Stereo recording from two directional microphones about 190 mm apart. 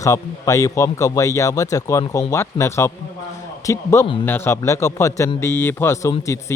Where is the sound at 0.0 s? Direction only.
15° left (ahead or behind).